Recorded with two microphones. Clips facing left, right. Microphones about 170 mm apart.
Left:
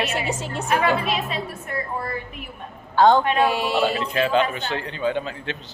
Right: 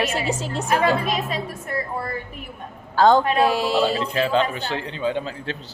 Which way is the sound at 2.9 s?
40° right (ahead or behind).